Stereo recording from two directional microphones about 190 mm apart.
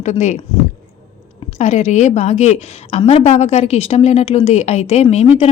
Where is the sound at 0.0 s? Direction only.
40° left (ahead or behind).